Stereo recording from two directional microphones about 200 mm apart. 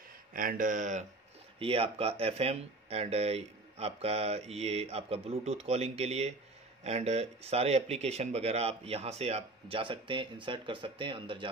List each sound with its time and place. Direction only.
0.3 s speech: 45° right (ahead or behind)
1.6 s speech: 30° right (ahead or behind)